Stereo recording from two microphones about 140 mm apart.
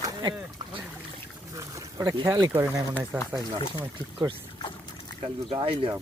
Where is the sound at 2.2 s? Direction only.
25° right (ahead or behind).